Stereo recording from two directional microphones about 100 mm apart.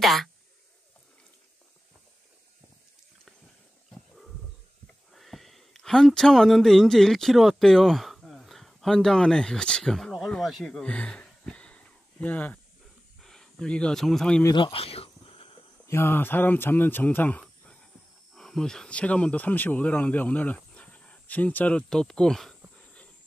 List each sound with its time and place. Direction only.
0.0 s speech: centre (ahead or behind)
5.1 s speech: centre (ahead or behind)
14.5 s a sound: 60° left (ahead or behind)
15.9 s speech: 25° left (ahead or behind)
18.3 s speech: 5° left (ahead or behind)